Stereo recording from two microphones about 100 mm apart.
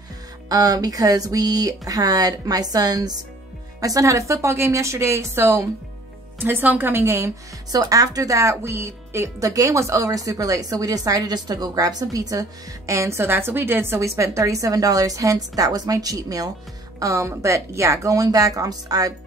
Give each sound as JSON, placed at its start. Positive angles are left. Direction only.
{"t": 0.5, "sound": "speech", "side_deg": -40}
{"t": 7.7, "sound": "speech", "side_deg": -40}